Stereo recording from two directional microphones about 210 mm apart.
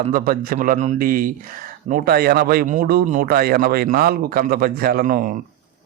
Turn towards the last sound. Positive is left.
turn(degrees=-45)  # may be behind; listen again after turning